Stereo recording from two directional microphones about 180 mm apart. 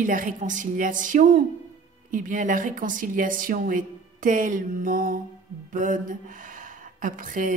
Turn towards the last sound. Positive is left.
turn(degrees=-50)  # may be behind; listen again after turning